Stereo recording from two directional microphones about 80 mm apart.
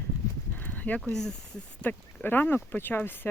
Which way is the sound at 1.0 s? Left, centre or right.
Centre.